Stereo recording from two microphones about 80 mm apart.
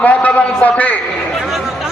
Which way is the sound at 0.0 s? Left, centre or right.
Centre.